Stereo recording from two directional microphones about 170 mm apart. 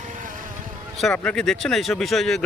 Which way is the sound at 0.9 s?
5° left (ahead or behind).